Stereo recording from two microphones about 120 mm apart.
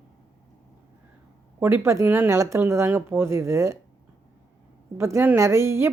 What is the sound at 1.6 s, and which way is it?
Speech, 25° right (ahead or behind).